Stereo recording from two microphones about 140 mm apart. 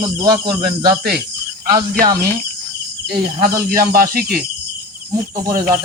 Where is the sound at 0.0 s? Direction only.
30° right (ahead or behind).